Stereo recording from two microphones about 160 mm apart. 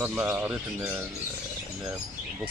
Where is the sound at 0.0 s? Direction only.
10° right (ahead or behind).